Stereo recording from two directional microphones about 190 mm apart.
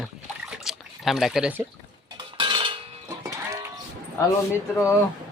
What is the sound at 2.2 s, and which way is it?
Cutlery, 25° right (ahead or behind).